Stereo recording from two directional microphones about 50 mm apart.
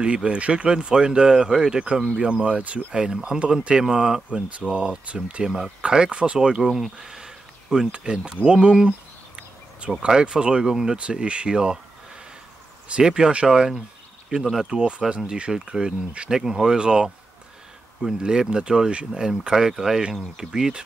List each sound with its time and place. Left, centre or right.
0.0 s speech: right
2.2 s speech: right
4.5 s speech: right
5.4 s speech: centre
5.8 s speech: centre
11.0 s speech: right
12.8 s speech: centre
14.4 s speech: centre